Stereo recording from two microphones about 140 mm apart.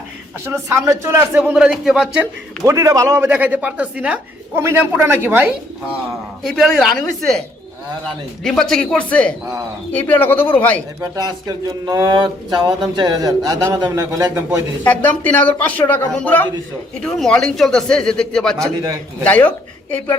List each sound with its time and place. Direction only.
0.4 s speech: 20° right (ahead or behind); by 2.6 s centre (ahead or behind)
2.6 s speech: 25° right (ahead or behind)
6.4 s speech: centre (ahead or behind)
8.4 s speech: 5° left (ahead or behind)
11.1 s speech: 25° right (ahead or behind)
14.8 s speech: 10° left (ahead or behind)